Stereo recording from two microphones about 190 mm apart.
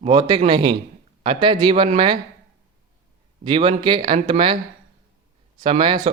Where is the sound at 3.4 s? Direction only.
25° right (ahead or behind).